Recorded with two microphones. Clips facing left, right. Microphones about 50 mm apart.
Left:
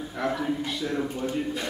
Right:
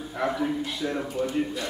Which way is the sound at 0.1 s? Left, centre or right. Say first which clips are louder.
Right 1 dB; centre.